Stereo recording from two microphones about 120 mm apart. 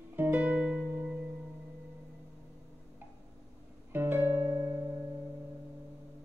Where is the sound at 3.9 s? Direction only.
20° right (ahead or behind).